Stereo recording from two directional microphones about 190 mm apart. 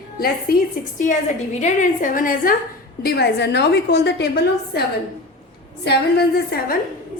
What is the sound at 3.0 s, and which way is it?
A woman's voice, 60° left (ahead or behind).